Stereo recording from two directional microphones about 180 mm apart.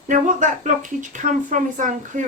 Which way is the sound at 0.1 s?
45° right (ahead or behind).